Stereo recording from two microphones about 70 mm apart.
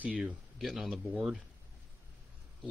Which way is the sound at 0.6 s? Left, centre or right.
Centre.